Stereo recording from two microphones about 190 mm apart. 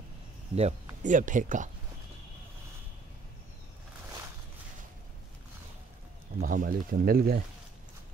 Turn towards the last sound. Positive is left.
turn(degrees=-50)  # may be behind; listen again after turning